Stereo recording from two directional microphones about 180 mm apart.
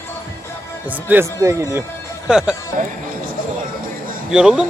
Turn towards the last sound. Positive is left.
turn(degrees=-5)  # may be behind; listen again after turning